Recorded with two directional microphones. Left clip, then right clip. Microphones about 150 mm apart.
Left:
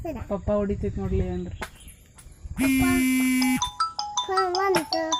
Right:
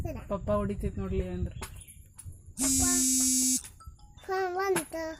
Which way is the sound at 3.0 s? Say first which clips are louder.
Left 6 dB; 60° right (ahead or behind).